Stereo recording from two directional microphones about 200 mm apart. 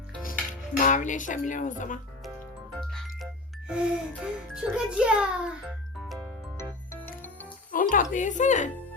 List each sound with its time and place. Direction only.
0.8 s speech: 40° left (ahead or behind)
2.7 s music: 5° left (ahead or behind)
3.7 s a child's voice: 5° right (ahead or behind)
6.6 s music: 15° left (ahead or behind)
7.7 s music: 40° left (ahead or behind)
8.1 s speech: 40° left (ahead or behind)